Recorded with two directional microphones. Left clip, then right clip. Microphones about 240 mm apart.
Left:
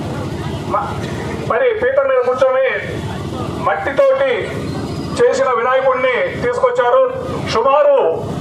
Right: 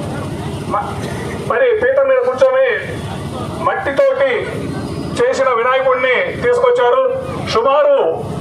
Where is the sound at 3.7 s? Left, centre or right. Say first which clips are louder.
Left 1 dB; right.